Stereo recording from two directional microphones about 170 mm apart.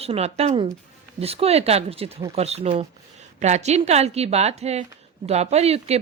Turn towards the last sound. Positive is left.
turn(degrees=-40)  # may be behind; listen again after turning